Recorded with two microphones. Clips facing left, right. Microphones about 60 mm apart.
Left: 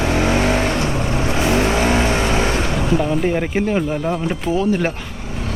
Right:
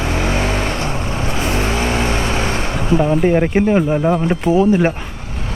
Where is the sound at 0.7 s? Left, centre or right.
Right.